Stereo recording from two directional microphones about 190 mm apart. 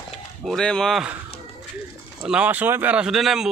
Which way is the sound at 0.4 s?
5° left (ahead or behind).